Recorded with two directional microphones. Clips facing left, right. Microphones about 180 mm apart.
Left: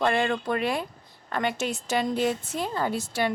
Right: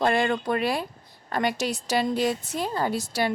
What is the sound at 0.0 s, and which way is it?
Speech, 35° right (ahead or behind).